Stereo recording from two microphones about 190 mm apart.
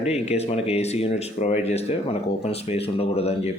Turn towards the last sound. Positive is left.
turn(degrees=35)  # may be behind; listen again after turning